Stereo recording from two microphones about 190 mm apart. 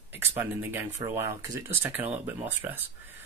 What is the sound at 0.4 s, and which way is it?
Speech, 10° right (ahead or behind).